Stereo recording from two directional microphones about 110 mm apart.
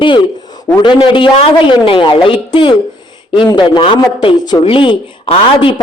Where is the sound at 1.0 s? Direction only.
50° left (ahead or behind).